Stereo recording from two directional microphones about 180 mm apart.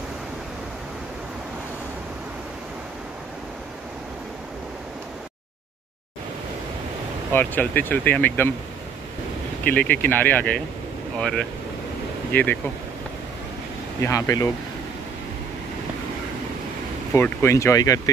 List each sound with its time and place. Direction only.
7.3 s speech: 10° left (ahead or behind)
9.7 s speech: 10° left (ahead or behind)
14.0 s speech: 15° left (ahead or behind)
17.1 s speech: 15° left (ahead or behind)